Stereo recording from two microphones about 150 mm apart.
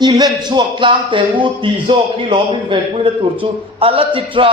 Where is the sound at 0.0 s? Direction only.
30° right (ahead or behind).